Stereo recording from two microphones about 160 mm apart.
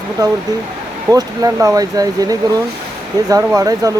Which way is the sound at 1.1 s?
20° right (ahead or behind).